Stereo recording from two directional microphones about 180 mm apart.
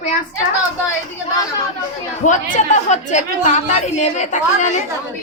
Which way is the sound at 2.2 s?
45° left (ahead or behind).